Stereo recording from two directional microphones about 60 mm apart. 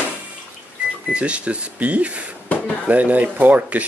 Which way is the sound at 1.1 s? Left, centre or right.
Centre.